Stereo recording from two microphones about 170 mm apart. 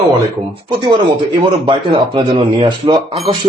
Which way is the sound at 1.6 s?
35° right (ahead or behind).